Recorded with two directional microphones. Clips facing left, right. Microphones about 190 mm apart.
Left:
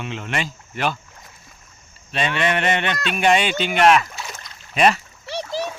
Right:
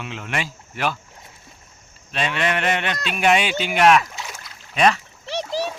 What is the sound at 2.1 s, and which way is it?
Speech, centre (ahead or behind).